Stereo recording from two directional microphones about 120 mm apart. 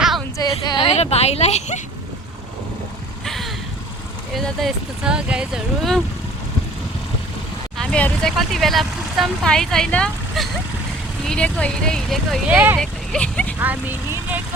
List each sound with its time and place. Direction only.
0.3 s a sound: 35° left (ahead or behind)
0.9 s speech: 60° left (ahead or behind)
3.2 s vehicle: centre (ahead or behind)
4.4 s speech: centre (ahead or behind)
7.8 s speech: 10° left (ahead or behind)
12.5 s speech: 10° right (ahead or behind)
12.8 s vehicle: 10° left (ahead or behind)
13.6 s speech: 15° right (ahead or behind)